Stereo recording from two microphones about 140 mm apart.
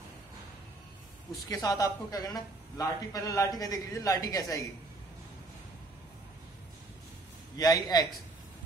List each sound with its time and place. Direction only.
1.5 s a man's voice: 25° left (ahead or behind)
7.5 s a man's voice: 25° left (ahead or behind)